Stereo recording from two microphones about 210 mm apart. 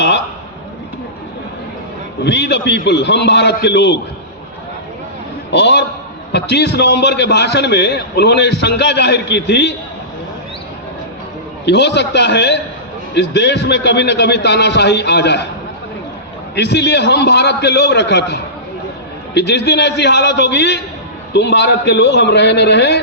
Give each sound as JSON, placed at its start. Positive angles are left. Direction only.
{"t": 2.2, "sound": "a man's voice", "side_deg": 55}
{"t": 5.5, "sound": "a man's voice", "side_deg": 55}
{"t": 11.6, "sound": "a man's voice", "side_deg": 55}
{"t": 16.6, "sound": "a man's voice", "side_deg": 55}